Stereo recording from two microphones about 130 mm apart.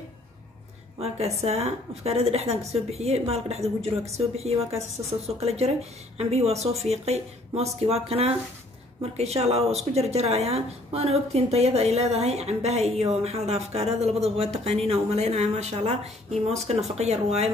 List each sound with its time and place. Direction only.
0.9 s a woman's voice: 55° right (ahead or behind)